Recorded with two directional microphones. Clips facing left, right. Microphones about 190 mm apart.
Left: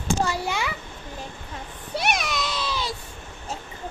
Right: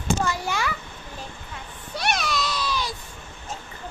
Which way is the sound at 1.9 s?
20° left (ahead or behind).